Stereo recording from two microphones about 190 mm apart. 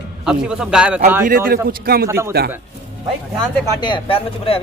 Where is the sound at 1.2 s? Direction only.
50° right (ahead or behind).